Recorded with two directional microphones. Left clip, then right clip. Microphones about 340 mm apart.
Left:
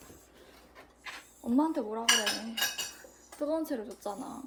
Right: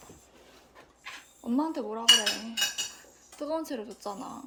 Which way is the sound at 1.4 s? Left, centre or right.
Centre.